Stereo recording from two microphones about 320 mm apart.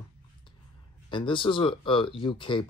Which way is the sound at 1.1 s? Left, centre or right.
Centre.